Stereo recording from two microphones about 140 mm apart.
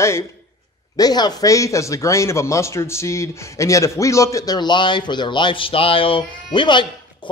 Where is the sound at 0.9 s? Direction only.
30° left (ahead or behind).